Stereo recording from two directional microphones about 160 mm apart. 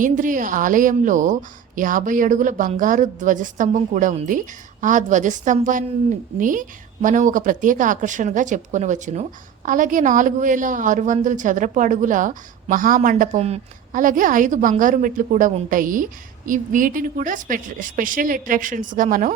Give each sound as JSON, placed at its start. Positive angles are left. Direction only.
{"t": 0.0, "sound": "a woman's voice", "side_deg": -55}